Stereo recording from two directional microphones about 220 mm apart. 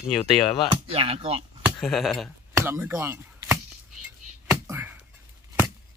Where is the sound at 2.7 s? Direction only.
10° right (ahead or behind).